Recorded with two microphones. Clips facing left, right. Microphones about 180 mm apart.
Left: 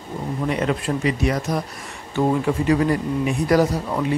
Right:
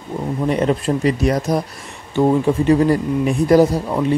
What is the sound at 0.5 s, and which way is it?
Speech, 35° right (ahead or behind).